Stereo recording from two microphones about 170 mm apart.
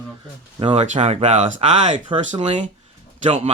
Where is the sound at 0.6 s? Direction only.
35° right (ahead or behind).